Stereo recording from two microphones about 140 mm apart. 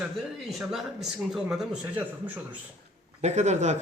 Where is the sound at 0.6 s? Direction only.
5° right (ahead or behind).